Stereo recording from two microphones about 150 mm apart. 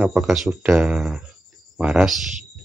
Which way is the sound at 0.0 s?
5° right (ahead or behind).